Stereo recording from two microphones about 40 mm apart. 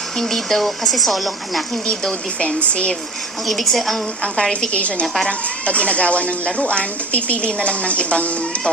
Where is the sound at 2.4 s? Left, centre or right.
Left.